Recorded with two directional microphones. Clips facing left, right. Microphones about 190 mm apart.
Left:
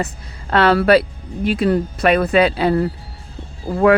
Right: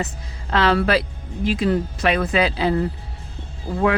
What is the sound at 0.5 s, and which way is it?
Speech, 60° left (ahead or behind).